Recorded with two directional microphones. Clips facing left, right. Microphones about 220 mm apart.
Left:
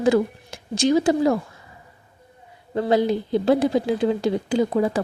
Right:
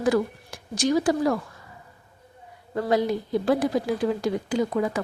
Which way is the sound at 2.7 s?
25° left (ahead or behind).